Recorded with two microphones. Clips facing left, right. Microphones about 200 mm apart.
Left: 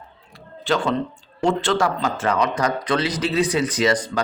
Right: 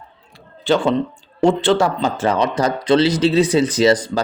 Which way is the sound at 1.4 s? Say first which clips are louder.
Right 5 dB; 25° right (ahead or behind).